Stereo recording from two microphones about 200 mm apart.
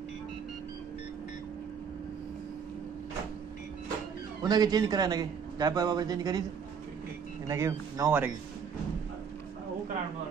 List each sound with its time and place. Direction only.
4.4 s a man's voice: 20° right (ahead or behind)
7.4 s speech: 15° right (ahead or behind)